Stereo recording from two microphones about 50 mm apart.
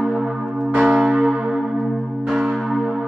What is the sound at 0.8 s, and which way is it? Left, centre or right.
Church bell, centre.